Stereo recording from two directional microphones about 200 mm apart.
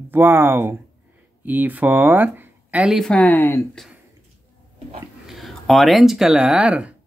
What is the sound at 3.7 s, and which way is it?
Speech, centre (ahead or behind).